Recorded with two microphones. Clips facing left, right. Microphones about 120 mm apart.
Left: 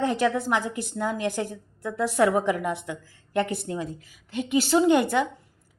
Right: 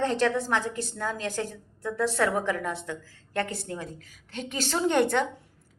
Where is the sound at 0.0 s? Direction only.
15° left (ahead or behind).